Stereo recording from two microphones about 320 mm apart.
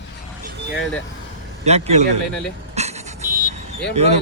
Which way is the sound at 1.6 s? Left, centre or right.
Centre.